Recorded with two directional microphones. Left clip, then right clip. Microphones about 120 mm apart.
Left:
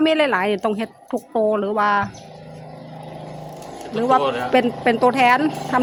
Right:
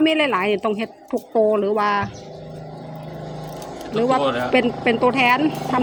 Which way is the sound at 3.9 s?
20° left (ahead or behind).